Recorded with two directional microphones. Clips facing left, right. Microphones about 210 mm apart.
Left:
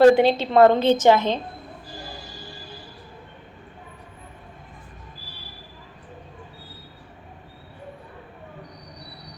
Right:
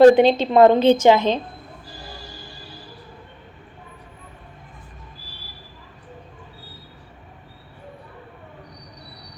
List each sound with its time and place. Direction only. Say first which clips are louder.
0.0 s a woman's voice: right 3 dB; 20° right (ahead or behind)